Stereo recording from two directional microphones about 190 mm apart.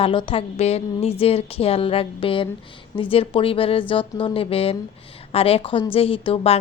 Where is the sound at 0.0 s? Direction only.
25° left (ahead or behind).